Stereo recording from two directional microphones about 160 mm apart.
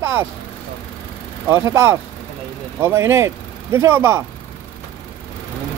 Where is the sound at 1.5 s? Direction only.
15° right (ahead or behind).